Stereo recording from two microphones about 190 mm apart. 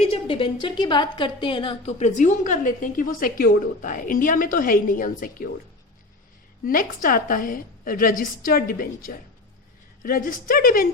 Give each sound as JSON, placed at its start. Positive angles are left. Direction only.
{"t": 0.0, "sound": "a woman's voice", "side_deg": 30}
{"t": 6.7, "sound": "a woman's voice", "side_deg": 45}